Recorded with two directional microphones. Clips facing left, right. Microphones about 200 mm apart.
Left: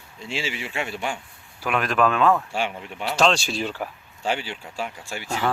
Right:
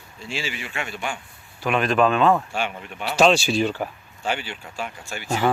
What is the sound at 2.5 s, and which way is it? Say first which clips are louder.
Speech: even; 30° left (ahead or behind).